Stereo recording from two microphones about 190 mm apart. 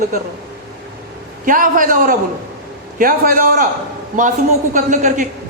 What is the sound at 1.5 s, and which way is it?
A man's voice, 45° right (ahead or behind).